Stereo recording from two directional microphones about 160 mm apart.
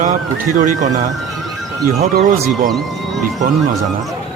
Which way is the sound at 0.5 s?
50° right (ahead or behind).